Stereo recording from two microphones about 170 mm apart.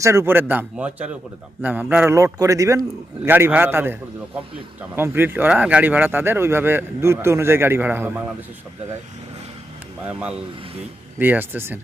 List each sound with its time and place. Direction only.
0.0 s speech: 15° right (ahead or behind)
10.1 s speech: 5° right (ahead or behind)